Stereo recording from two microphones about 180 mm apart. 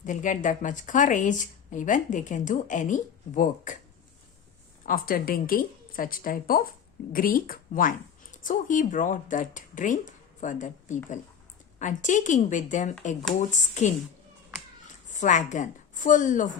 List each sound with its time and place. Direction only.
0.0 s speech: 45° left (ahead or behind)
4.9 s speech: 55° left (ahead or behind)
15.1 s speech: 45° left (ahead or behind)